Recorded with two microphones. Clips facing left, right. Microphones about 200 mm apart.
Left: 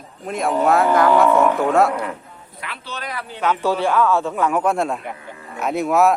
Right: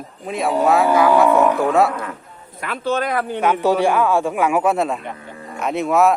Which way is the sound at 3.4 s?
15° right (ahead or behind).